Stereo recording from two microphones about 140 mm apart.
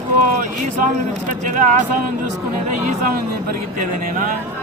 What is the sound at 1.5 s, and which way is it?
Speech, 65° right (ahead or behind).